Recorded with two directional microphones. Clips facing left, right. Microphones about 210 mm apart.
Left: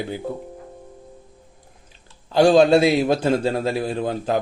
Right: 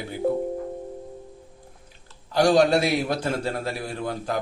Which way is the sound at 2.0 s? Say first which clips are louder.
Left 5 dB; 25° left (ahead or behind).